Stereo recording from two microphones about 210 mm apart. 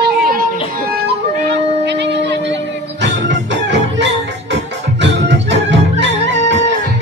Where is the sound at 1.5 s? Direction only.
55° right (ahead or behind).